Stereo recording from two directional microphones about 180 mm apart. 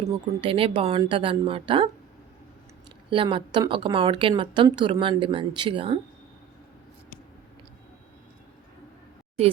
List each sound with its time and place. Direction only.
0.4 s speech: 30° right (ahead or behind)
3.1 s speech: 30° right (ahead or behind)